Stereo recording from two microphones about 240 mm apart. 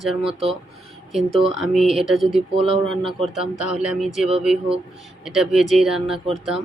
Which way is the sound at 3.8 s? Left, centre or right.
Centre.